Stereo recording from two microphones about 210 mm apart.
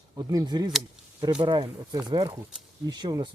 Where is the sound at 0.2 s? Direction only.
20° right (ahead or behind).